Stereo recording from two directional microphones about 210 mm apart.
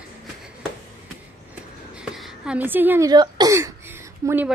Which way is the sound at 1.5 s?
5° right (ahead or behind).